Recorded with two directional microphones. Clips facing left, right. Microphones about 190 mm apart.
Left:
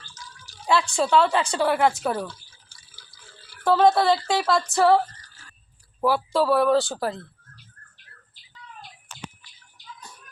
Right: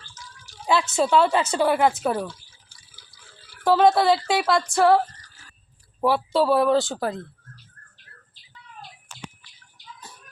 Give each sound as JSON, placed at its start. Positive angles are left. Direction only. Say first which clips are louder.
{"t": 0.1, "sound": "drip", "louder": "left 1 dB", "side_deg": -25}
{"t": 0.7, "sound": "a woman's voice", "louder": "right 1 dB", "side_deg": -5}
{"t": 2.1, "sound": "drip", "louder": "right 2 dB", "side_deg": -20}
{"t": 3.6, "sound": "a woman's voice", "louder": "right 1 dB", "side_deg": -5}
{"t": 6.1, "sound": "a woman's voice", "louder": "right 1 dB", "side_deg": -5}